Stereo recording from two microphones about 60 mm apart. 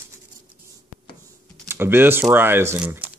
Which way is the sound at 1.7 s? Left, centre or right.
Right.